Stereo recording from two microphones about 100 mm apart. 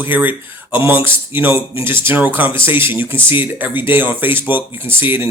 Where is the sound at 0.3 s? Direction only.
55° left (ahead or behind).